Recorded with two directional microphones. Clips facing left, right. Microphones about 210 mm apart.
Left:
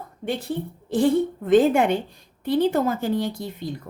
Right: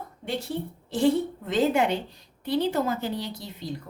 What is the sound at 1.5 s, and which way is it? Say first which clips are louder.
A woman's voice: left 6 dB; 50° left (ahead or behind).